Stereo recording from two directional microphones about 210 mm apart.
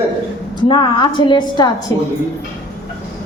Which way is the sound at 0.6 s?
20° left (ahead or behind).